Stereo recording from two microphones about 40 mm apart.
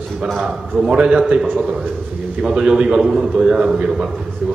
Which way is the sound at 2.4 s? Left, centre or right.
Right.